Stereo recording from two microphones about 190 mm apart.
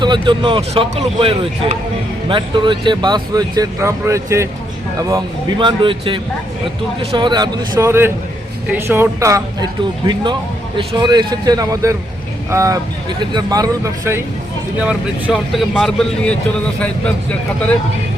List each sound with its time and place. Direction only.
0.0 s speech: 25° right (ahead or behind)
10.8 s speech: 25° right (ahead or behind)
14.8 s speech: 5° right (ahead or behind)